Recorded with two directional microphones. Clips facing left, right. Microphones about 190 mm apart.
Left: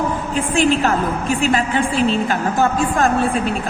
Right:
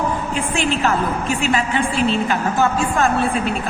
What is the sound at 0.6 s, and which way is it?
Speech, 45° left (ahead or behind).